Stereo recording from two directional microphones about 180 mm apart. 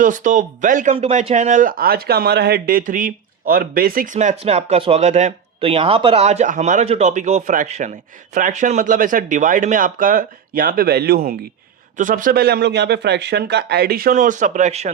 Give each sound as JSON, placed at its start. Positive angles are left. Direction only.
{"t": 0.0, "sound": "speech", "side_deg": -45}
{"t": 0.9, "sound": "speech", "side_deg": -35}
{"t": 11.9, "sound": "speech", "side_deg": -45}